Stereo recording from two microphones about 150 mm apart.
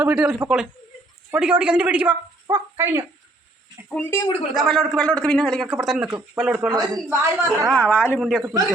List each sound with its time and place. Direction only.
0.0 s a woman's voice: 5° right (ahead or behind)
3.8 s speech: 10° left (ahead or behind)
4.5 s a man's voice: centre (ahead or behind)
6.7 s a man's voice: 25° right (ahead or behind)
7.8 s speech: 10° left (ahead or behind)
8.2 s a man's voice: centre (ahead or behind)